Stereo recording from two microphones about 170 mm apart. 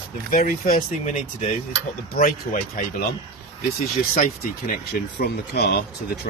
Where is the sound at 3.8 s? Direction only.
55° left (ahead or behind).